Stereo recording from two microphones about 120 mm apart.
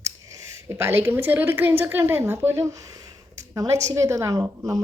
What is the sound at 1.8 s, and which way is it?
A woman's voice, 15° right (ahead or behind).